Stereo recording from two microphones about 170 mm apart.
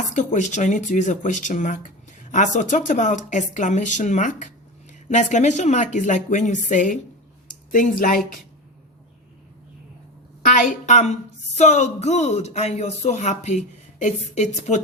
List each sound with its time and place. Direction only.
0.1 s speech: 45° left (ahead or behind)
10.8 s speech: 40° left (ahead or behind)